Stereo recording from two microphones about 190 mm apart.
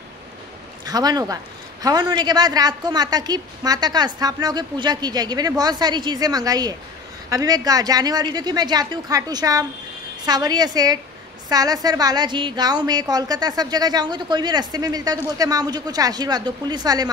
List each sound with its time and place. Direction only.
0.8 s a man's voice: 20° right (ahead or behind)